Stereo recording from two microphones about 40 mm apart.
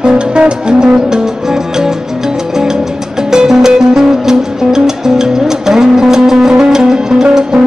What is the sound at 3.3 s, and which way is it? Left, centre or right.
Music, centre.